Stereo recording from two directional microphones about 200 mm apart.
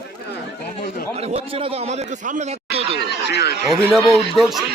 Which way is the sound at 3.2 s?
55° left (ahead or behind).